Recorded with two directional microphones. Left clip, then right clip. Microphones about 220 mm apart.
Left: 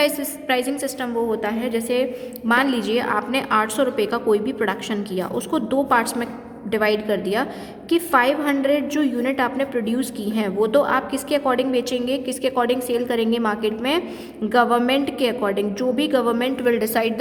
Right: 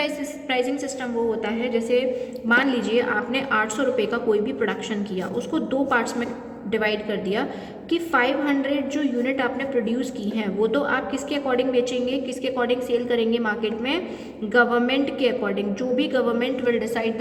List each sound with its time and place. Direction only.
0.0 s a woman's voice: 50° left (ahead or behind)